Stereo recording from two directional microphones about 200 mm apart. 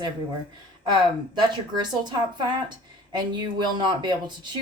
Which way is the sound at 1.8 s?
20° right (ahead or behind).